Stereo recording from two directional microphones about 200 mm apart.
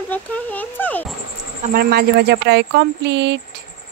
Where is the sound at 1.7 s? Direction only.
50° right (ahead or behind).